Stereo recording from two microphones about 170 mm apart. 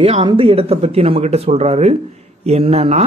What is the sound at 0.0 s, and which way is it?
Speech, 30° right (ahead or behind).